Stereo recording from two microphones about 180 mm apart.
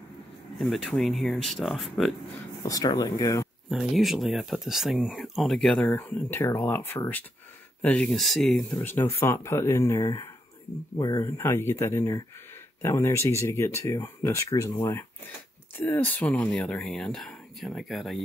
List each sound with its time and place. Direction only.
0.6 s speech: centre (ahead or behind)
2.6 s speech: 20° left (ahead or behind)
3.7 s speech: centre (ahead or behind)
8.7 s speech: 15° left (ahead or behind)
15.8 s speech: 10° left (ahead or behind)